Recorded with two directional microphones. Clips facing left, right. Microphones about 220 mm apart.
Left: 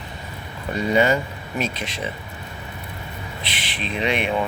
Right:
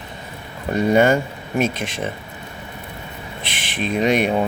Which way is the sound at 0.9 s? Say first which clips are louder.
Right 2 dB; 50° right (ahead or behind).